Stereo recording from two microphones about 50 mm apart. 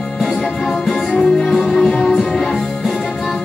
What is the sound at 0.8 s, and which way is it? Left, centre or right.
Music, centre.